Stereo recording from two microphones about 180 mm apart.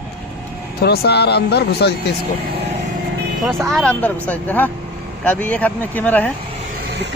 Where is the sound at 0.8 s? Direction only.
65° left (ahead or behind).